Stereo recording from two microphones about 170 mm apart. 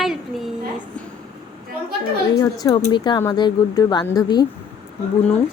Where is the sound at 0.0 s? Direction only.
Centre (ahead or behind).